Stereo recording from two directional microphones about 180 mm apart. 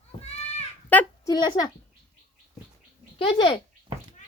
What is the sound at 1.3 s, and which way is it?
Speech, 20° left (ahead or behind).